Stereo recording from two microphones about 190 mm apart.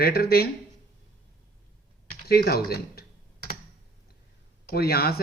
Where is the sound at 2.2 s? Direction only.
55° left (ahead or behind).